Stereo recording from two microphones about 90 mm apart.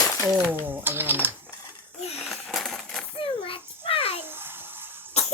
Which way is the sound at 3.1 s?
75° left (ahead or behind).